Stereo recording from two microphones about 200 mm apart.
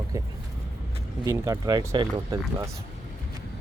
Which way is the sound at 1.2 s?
15° right (ahead or behind).